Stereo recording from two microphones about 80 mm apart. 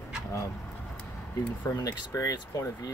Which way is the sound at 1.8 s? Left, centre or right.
Left.